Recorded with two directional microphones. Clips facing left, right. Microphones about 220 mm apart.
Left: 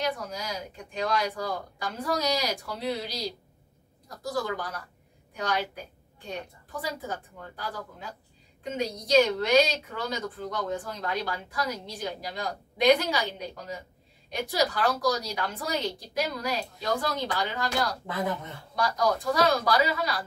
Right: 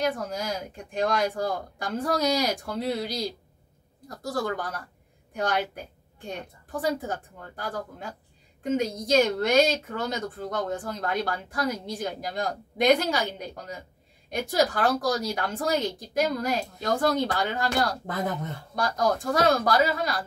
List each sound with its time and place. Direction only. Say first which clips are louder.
0.0 s speech: right 4 dB; 50° right (ahead or behind)
6.8 s speech: right 6 dB; 50° right (ahead or behind)